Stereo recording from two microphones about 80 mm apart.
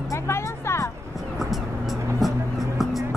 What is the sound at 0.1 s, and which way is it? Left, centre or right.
Music, left.